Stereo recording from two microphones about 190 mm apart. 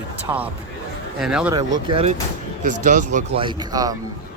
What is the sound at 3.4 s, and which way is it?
Speech, 20° right (ahead or behind).